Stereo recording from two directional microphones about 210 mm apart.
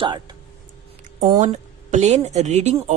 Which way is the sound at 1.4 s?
35° right (ahead or behind).